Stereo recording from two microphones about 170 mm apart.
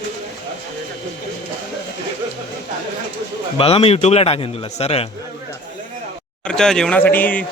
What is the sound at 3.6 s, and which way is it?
A man's voice, 35° left (ahead or behind).